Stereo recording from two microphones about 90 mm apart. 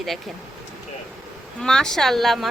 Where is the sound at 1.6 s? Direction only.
5° left (ahead or behind).